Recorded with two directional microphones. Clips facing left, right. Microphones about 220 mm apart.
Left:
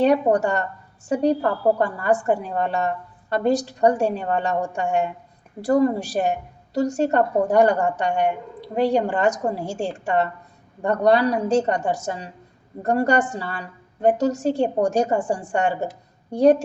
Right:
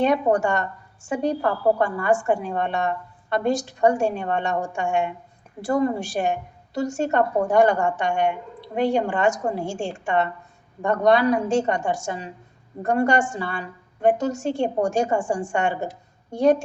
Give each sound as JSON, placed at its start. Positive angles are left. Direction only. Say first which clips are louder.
{"t": 0.0, "sound": "a woman's voice", "louder": "left 2 dB", "side_deg": 40}